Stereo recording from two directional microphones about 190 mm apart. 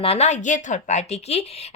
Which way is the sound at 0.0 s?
35° left (ahead or behind).